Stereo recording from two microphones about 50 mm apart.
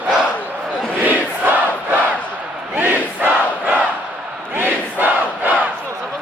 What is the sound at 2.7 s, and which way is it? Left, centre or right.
Crowd, right.